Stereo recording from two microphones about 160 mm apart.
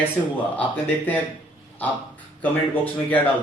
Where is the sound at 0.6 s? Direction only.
10° left (ahead or behind).